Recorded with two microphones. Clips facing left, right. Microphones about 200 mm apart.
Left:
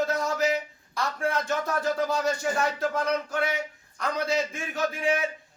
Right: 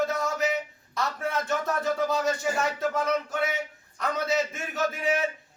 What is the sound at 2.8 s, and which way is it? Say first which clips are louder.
Speech: even; centre (ahead or behind).